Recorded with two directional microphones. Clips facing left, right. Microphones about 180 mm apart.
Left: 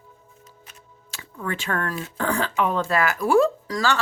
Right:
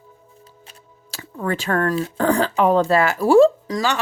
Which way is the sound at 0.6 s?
40° right (ahead or behind).